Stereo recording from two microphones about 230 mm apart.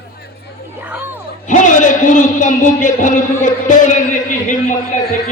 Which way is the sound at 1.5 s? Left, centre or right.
Left.